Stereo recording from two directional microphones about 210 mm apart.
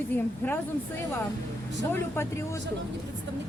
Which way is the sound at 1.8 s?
10° left (ahead or behind).